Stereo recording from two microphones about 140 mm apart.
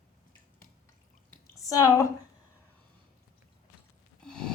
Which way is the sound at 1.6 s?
25° left (ahead or behind).